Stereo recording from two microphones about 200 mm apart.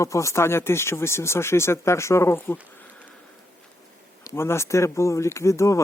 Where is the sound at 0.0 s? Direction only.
15° left (ahead or behind).